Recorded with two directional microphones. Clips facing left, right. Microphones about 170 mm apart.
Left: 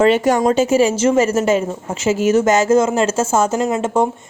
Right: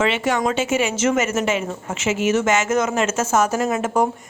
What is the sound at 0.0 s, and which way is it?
A woman's voice, 40° left (ahead or behind).